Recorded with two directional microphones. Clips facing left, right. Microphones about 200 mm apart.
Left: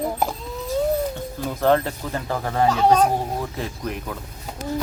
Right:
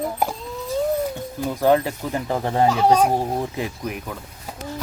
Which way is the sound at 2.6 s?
10° right (ahead or behind).